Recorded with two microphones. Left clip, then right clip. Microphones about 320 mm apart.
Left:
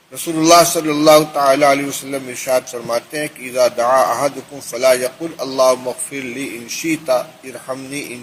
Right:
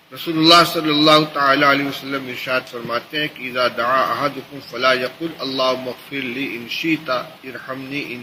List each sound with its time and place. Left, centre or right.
0.3 s a man's voice: centre